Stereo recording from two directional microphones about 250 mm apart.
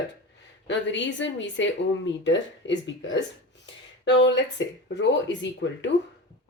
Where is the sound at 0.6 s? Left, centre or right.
Left.